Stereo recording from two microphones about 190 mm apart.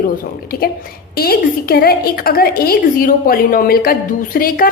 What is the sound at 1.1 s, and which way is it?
A woman's voice, 55° left (ahead or behind).